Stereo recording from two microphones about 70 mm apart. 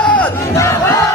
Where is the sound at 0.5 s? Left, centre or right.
Left.